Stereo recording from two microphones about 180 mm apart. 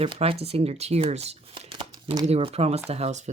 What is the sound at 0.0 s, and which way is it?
Speech, 30° right (ahead or behind).